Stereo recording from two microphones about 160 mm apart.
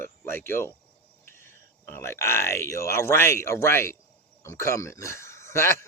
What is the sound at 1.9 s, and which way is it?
A man's voice, 15° left (ahead or behind).